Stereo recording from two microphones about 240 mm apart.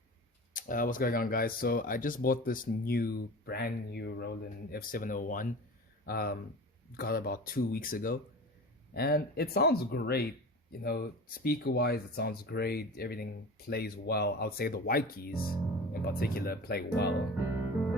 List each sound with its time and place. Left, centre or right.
0.5 s speech: left